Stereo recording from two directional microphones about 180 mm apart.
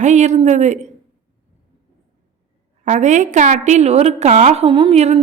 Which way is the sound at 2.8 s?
40° right (ahead or behind).